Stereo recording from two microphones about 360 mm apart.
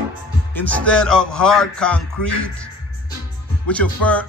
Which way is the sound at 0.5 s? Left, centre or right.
Centre.